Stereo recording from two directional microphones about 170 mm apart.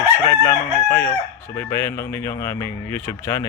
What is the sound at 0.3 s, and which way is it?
Chicken, 20° left (ahead or behind).